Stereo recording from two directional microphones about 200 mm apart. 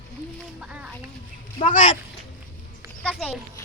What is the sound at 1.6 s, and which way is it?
Speech, 40° left (ahead or behind).